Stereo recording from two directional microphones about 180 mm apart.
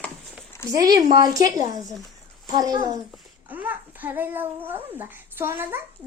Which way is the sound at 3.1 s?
10° right (ahead or behind).